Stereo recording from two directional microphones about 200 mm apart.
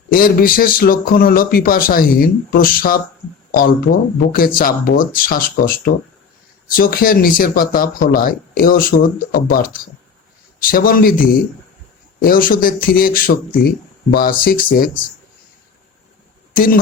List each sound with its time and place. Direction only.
0.1 s speech: 45° left (ahead or behind)
16.6 s speech: 45° left (ahead or behind)